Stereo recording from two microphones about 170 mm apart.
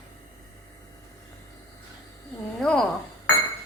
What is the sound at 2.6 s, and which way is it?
Speech, 5° left (ahead or behind).